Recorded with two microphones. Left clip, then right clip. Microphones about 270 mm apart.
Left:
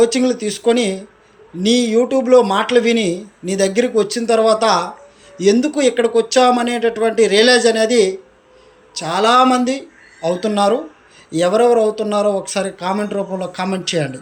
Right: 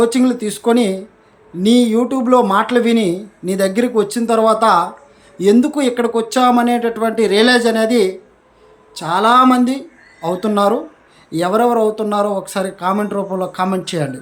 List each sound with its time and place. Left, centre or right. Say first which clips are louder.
0.0 s speech: even; centre